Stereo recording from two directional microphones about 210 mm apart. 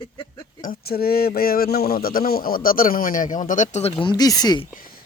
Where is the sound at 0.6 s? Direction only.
45° left (ahead or behind); by 4.6 s 20° left (ahead or behind).